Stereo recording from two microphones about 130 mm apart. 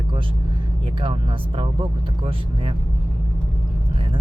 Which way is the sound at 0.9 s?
40° right (ahead or behind).